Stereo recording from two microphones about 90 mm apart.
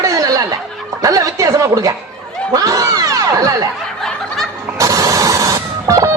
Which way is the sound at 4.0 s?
5° left (ahead or behind).